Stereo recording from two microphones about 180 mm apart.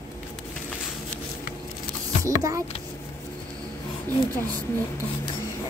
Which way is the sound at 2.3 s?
15° right (ahead or behind).